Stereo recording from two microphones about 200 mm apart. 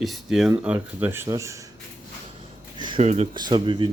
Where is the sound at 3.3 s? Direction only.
20° right (ahead or behind).